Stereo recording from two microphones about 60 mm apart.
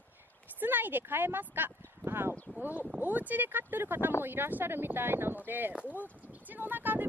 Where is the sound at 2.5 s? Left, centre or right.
Right.